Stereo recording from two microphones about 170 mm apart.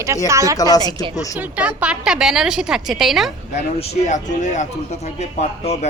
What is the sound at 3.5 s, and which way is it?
Speech, 45° left (ahead or behind).